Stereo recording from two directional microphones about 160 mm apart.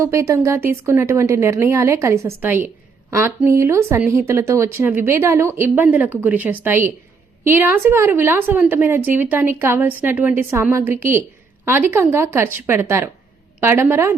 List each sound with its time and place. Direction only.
0.0 s speech: 20° right (ahead or behind)